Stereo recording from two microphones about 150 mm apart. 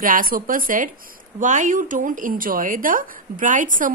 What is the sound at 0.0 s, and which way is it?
Speech, 65° right (ahead or behind).